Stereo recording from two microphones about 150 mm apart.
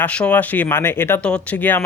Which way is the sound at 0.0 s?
10° left (ahead or behind).